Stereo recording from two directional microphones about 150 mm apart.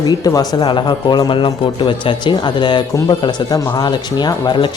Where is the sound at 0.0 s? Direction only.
25° left (ahead or behind).